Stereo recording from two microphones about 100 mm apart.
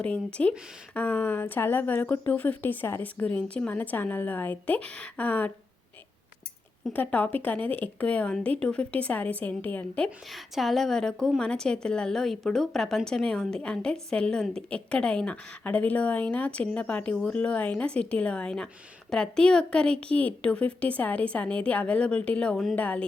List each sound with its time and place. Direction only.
0.0 s speech: 10° left (ahead or behind)
6.9 s speech: 15° left (ahead or behind)
10.3 s a woman's voice: centre (ahead or behind)